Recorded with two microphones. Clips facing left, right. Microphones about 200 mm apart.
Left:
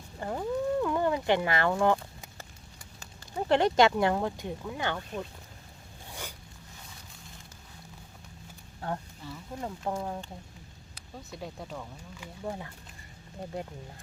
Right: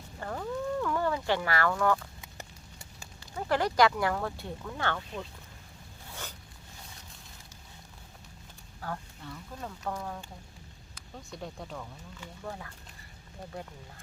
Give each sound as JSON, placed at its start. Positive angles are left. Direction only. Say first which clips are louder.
{"t": 0.2, "sound": "wild animals", "louder": "left 4 dB", "side_deg": 20}
{"t": 3.3, "sound": "speech", "louder": "left 3 dB", "side_deg": 25}
{"t": 6.1, "sound": "a sound", "louder": "left 1 dB", "side_deg": 15}
{"t": 8.8, "sound": "speech", "louder": "left 4 dB", "side_deg": 25}
{"t": 9.2, "sound": "speech", "louder": "left 2 dB", "side_deg": 5}
{"t": 9.6, "sound": "speech", "louder": "left 4 dB", "side_deg": 25}
{"t": 11.3, "sound": "speech", "louder": "left 1 dB", "side_deg": 5}
{"t": 12.5, "sound": "speech", "louder": "left 4 dB", "side_deg": 25}